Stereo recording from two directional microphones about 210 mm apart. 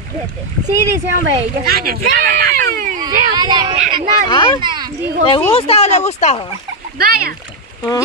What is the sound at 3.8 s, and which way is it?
Speech, 40° right (ahead or behind).